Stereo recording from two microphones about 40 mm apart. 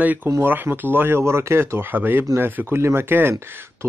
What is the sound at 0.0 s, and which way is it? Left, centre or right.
Speech, right.